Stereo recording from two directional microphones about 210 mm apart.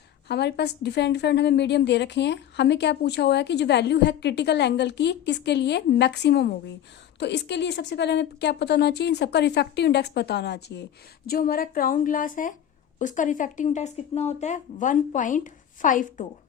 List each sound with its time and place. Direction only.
0.3 s a woman's voice: 50° left (ahead or behind)